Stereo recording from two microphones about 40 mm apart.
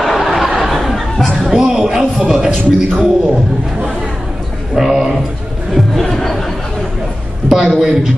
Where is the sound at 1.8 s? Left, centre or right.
Centre.